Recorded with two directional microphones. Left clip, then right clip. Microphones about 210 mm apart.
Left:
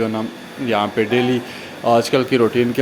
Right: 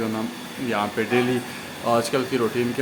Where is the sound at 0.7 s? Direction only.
20° left (ahead or behind).